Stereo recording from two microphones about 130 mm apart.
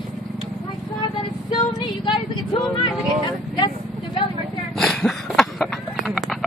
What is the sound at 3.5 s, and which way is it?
Vehicle, 40° left (ahead or behind).